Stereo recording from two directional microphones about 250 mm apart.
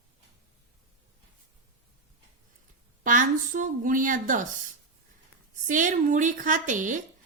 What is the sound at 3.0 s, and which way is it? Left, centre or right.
Speech, right.